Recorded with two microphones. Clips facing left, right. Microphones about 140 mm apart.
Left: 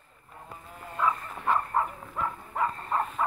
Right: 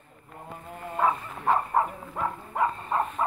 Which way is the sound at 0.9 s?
40° right (ahead or behind).